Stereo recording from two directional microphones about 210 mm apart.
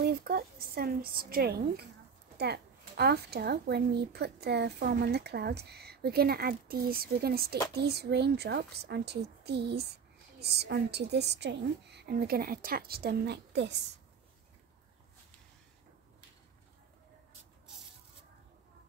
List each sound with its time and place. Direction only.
0.0 s speech: 50° right (ahead or behind)